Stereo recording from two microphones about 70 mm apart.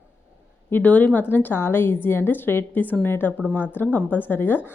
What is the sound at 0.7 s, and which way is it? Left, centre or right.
A woman's voice, left.